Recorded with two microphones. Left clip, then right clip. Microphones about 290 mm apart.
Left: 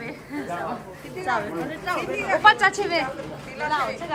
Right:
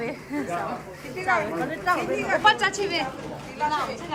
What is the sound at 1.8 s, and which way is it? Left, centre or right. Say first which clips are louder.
Speech: right 2 dB; right.